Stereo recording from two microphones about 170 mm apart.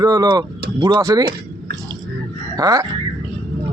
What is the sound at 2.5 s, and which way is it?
Speech, 20° right (ahead or behind).